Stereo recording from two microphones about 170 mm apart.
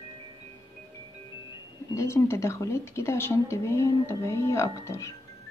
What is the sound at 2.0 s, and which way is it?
A woman's voice, 15° left (ahead or behind).